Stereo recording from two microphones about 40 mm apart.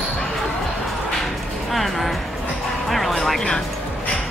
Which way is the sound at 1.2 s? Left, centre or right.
Centre.